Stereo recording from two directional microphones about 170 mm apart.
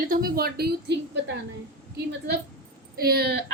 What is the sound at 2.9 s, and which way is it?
Speech, 65° right (ahead or behind).